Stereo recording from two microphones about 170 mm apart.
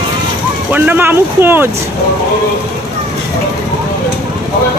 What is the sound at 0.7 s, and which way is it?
Speech, 10° right (ahead or behind).